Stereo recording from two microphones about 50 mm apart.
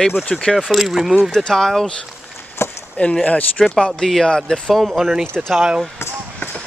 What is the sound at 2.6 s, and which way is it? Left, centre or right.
Chop, left.